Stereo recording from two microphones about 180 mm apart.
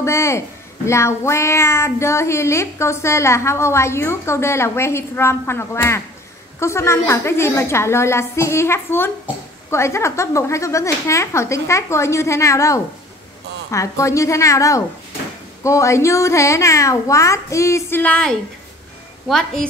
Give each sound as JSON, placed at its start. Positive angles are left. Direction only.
{"t": 0.0, "sound": "child singing", "side_deg": 15}
{"t": 19.2, "sound": "a woman's voice", "side_deg": 0}